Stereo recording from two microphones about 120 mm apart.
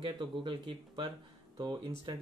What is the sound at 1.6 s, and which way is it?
Speech, 30° right (ahead or behind).